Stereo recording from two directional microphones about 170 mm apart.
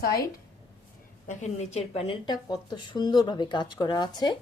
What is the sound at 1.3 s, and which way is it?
A woman's voice, 45° left (ahead or behind).